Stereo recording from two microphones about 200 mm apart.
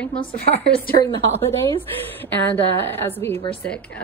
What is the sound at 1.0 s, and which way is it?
Speech, 40° right (ahead or behind).